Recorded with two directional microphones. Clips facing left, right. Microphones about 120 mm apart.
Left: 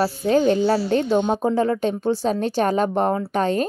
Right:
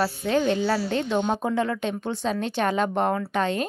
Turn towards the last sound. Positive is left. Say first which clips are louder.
# left 4 dB
turn(degrees=40)  # may be behind; listen again after turning